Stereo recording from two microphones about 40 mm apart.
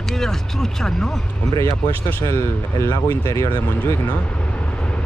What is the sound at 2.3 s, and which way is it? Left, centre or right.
Speech, left.